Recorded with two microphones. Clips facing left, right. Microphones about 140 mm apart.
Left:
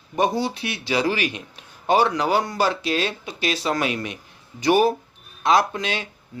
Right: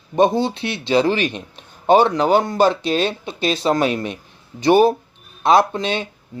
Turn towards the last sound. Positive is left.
turn(degrees=-25)  # may be behind; listen again after turning